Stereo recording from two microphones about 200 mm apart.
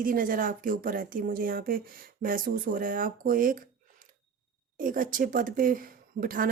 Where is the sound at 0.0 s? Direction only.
45° right (ahead or behind).